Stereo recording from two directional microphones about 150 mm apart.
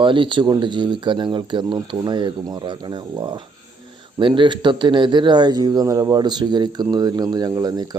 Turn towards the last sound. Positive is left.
turn(degrees=-25)  # may be behind; listen again after turning